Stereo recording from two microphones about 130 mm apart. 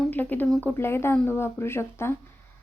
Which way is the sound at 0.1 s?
15° left (ahead or behind).